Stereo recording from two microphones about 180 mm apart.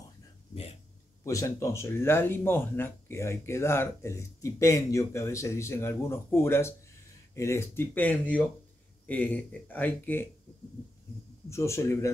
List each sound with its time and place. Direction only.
1.2 s speech: 15° left (ahead or behind)
11.4 s speech: 15° left (ahead or behind)